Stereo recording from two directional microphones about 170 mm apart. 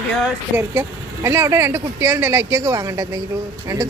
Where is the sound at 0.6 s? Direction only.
15° right (ahead or behind).